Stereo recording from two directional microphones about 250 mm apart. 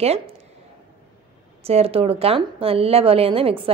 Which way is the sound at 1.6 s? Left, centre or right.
Right.